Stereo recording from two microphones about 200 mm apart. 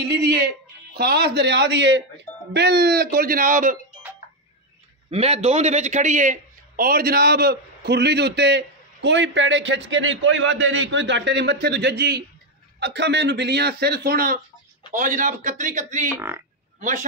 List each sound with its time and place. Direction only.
0.0 s music: 55° right (ahead or behind)
0.9 s a man's voice: 55° right (ahead or behind)
5.1 s a man's voice: 30° right (ahead or behind)
16.2 s speech: 10° right (ahead or behind)